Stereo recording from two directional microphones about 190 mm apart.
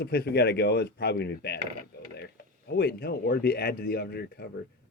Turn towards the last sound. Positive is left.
turn(degrees=55)  # may be behind; listen again after turning